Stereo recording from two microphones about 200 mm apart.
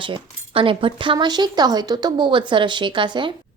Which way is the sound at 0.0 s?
25° right (ahead or behind).